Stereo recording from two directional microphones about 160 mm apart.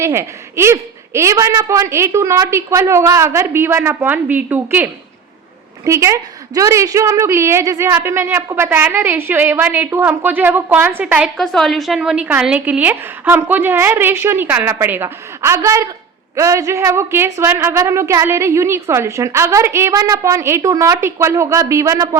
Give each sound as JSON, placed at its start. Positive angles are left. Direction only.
{"t": 0.0, "sound": "speech", "side_deg": -15}